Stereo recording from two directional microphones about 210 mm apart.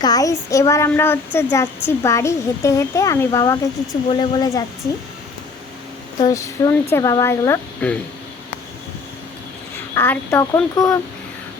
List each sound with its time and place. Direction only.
0.0 s speech: 15° left (ahead or behind)
6.1 s speech: 15° left (ahead or behind)
9.9 s speech: 10° left (ahead or behind)